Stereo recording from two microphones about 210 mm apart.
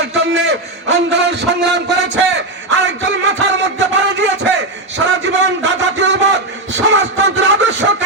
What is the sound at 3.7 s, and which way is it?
A man's voice, 60° right (ahead or behind).